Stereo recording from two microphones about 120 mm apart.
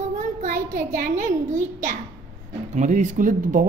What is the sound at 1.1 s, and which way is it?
Speech, 90° right.